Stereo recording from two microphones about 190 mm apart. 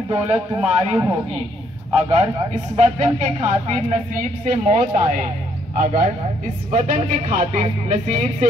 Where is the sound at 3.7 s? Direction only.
45° right (ahead or behind).